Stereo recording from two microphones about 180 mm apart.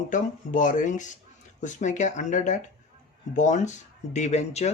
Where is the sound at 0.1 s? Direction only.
45° left (ahead or behind).